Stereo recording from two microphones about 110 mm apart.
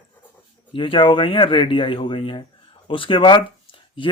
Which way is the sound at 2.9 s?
50° left (ahead or behind).